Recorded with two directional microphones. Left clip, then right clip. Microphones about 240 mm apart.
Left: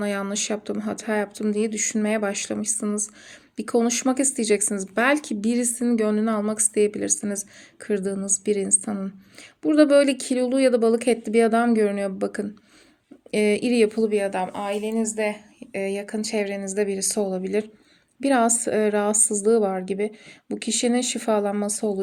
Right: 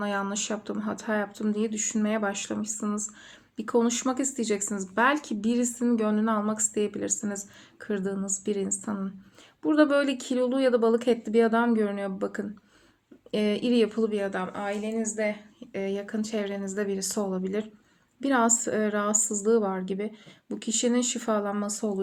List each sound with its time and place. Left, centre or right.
0.0 s speech: left
16.4 s speech: left